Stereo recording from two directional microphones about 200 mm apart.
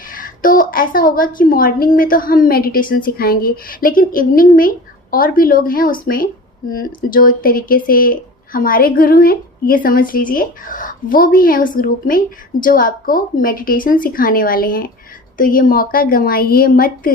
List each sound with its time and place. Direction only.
0.1 s a woman's voice: 45° left (ahead or behind)